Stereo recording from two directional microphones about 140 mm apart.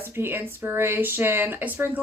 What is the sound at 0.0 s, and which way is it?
Speech, 15° right (ahead or behind).